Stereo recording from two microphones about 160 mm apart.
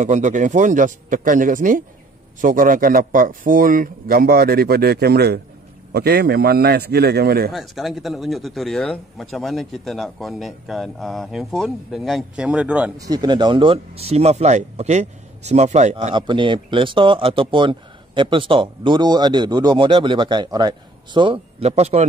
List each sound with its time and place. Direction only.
0.0 s a man's voice: 50° right (ahead or behind); by 7.5 s 75° right (ahead or behind)
7.5 s speech: centre (ahead or behind)
12.9 s speech: 25° right (ahead or behind); by 16.1 s 45° right (ahead or behind)
16.2 s speech: 30° right (ahead or behind)